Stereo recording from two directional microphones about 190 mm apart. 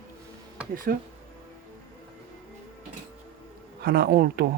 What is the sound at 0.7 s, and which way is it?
Speech, 50° right (ahead or behind).